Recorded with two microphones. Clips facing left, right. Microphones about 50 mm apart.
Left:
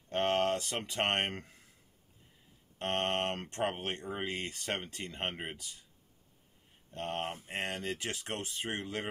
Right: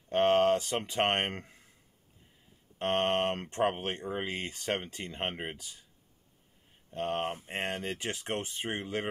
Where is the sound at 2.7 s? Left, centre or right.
Right.